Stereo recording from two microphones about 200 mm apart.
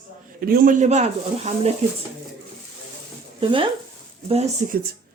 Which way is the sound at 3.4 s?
25° right (ahead or behind).